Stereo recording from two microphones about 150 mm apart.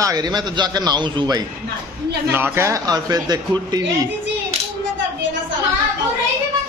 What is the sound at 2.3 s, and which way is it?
A man's voice, 15° right (ahead or behind).